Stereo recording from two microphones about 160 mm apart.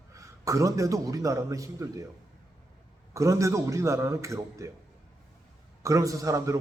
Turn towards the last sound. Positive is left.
turn(degrees=-20)  # may be behind; listen again after turning